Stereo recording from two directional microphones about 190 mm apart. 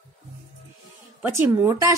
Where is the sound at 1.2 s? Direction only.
15° right (ahead or behind).